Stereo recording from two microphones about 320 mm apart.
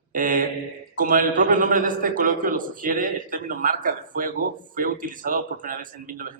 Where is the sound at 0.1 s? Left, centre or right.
Right.